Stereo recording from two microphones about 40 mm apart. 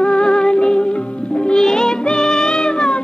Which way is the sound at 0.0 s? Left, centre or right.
Left.